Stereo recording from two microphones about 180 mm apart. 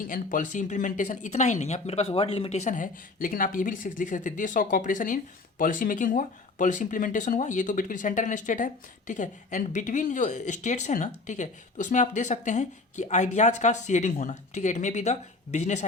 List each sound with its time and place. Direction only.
0.1 s speech: 50° left (ahead or behind)